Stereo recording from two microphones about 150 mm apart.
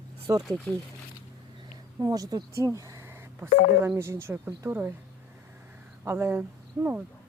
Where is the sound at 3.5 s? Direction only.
55° left (ahead or behind).